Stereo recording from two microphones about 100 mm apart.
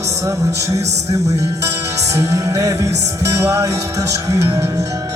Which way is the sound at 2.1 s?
30° right (ahead or behind).